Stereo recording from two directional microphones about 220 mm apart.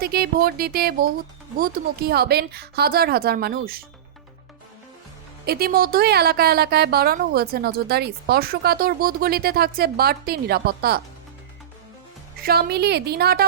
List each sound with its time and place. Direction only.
0.0 s a woman's voice: 45° right (ahead or behind)
5.5 s a woman's voice: 45° right (ahead or behind)
12.4 s a woman's voice: 45° right (ahead or behind)